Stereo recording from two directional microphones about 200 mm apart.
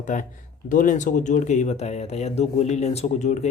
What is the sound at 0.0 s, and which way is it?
Speech, 40° left (ahead or behind).